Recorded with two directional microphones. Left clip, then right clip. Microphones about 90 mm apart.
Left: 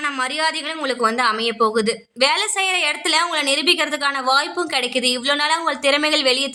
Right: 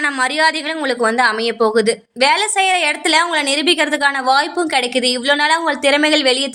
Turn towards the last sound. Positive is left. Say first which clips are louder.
# right 4 dB
turn(degrees=-35)  # may be behind; listen again after turning